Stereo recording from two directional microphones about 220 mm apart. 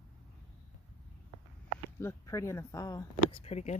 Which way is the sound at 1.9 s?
15° left (ahead or behind).